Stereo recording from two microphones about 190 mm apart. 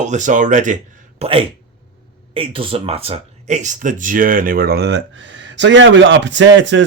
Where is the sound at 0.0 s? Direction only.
40° right (ahead or behind).